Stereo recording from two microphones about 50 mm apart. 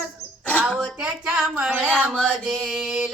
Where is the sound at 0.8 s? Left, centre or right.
Centre.